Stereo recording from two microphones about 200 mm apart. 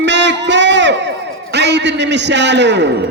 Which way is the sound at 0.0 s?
60° right (ahead or behind).